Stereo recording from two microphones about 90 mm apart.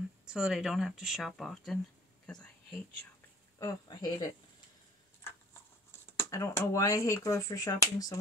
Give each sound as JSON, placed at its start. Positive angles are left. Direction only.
{"t": 0.3, "sound": "speech", "side_deg": -5}
{"t": 2.2, "sound": "whispering", "side_deg": 15}
{"t": 3.5, "sound": "speech", "side_deg": 45}
{"t": 5.9, "sound": "speech", "side_deg": 30}